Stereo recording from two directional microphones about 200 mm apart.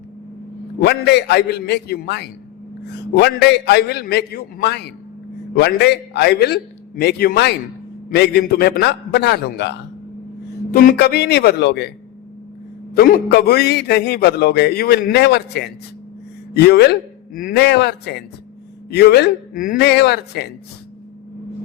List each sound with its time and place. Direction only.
0.8 s a man's voice: 55° left (ahead or behind)
10.7 s a man's voice: 45° left (ahead or behind)
12.9 s a man's voice: 50° left (ahead or behind)